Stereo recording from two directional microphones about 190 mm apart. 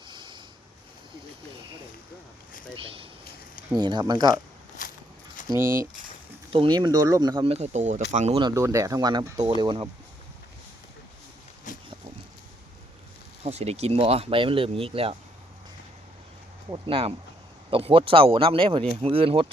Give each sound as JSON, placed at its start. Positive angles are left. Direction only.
{"t": 0.1, "sound": "a sound", "side_deg": -25}
{"t": 3.8, "sound": "speech", "side_deg": -20}
{"t": 6.5, "sound": "speech", "side_deg": -25}
{"t": 8.4, "sound": "speech", "side_deg": -20}
{"t": 13.4, "sound": "speech", "side_deg": -35}
{"t": 16.6, "sound": "speech", "side_deg": -25}